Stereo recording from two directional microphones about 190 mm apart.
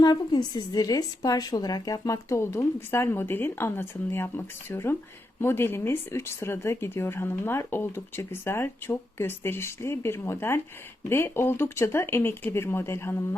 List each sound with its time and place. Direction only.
0.0 s speech: 20° left (ahead or behind)